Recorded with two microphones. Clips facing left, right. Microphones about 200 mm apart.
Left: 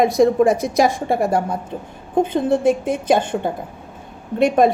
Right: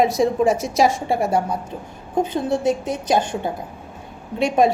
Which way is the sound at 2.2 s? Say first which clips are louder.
Left 3 dB; 55° left (ahead or behind).